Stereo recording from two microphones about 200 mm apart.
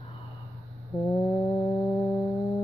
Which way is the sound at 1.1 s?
10° left (ahead or behind).